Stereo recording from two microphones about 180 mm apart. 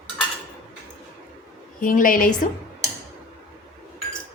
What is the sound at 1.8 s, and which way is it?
Speech, 50° left (ahead or behind).